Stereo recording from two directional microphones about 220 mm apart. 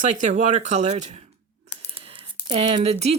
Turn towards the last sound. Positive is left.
turn(degrees=-30)  # may be behind; listen again after turning